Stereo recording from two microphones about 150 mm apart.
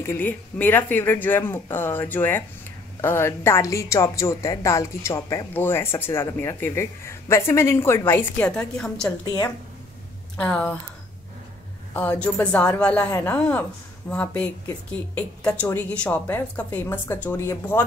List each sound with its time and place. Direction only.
0.0 s a woman's voice: 15° left (ahead or behind)
9.2 s speech: 25° left (ahead or behind)
10.3 s a woman's voice: 5° left (ahead or behind)
11.9 s a woman's voice: 10° left (ahead or behind)